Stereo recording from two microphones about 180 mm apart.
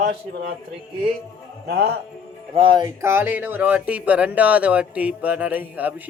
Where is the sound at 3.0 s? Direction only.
10° right (ahead or behind).